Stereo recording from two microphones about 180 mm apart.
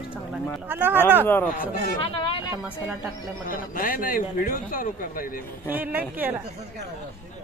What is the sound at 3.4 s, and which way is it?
Speech, 50° left (ahead or behind).